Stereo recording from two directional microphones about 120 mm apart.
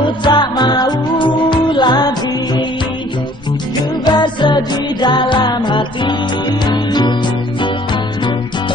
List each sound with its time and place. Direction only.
0.0 s music: 40° left (ahead or behind)
4.0 s music: 40° left (ahead or behind)